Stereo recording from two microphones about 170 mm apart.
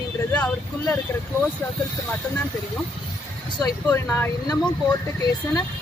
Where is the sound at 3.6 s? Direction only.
15° left (ahead or behind).